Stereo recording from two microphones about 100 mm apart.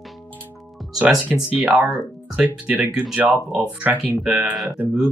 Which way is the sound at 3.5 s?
10° right (ahead or behind).